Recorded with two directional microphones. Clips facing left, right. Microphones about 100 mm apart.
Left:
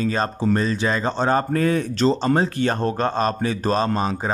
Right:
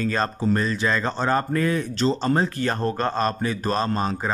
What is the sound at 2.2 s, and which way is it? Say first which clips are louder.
Speech: left 2 dB; 20° left (ahead or behind).